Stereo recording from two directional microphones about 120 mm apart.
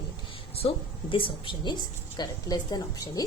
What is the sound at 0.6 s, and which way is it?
A woman's voice, 50° left (ahead or behind).